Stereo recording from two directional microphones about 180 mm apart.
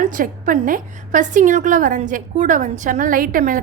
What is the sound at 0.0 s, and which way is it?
A woman's voice, 50° right (ahead or behind).